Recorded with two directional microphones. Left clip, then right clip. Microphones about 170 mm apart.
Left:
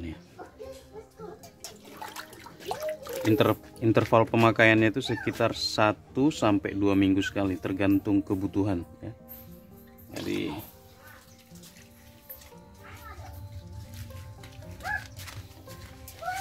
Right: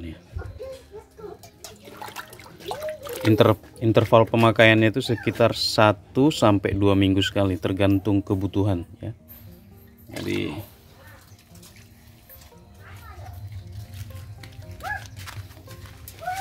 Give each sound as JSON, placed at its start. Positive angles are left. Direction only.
{"t": 1.6, "sound": "toilet flush", "side_deg": -30}
{"t": 2.7, "sound": "a sound", "side_deg": -30}
{"t": 3.8, "sound": "speech", "side_deg": -5}
{"t": 10.1, "sound": "speech", "side_deg": -25}